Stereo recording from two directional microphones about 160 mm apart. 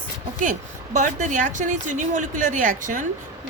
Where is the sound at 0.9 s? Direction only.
50° right (ahead or behind).